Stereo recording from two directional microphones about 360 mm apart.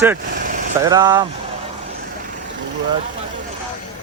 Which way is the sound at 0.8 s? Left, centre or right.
Centre.